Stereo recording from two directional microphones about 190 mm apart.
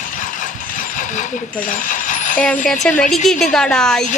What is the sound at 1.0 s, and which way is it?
Speech, 40° left (ahead or behind).